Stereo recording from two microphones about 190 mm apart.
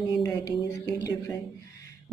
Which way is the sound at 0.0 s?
20° left (ahead or behind).